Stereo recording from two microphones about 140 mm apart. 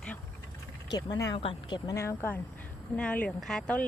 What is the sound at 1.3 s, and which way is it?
Speech, 35° left (ahead or behind).